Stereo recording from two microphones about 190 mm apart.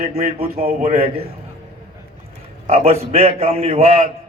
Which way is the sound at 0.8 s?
35° right (ahead or behind).